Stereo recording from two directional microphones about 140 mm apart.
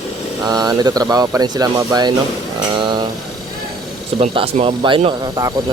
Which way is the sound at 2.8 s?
35° right (ahead or behind).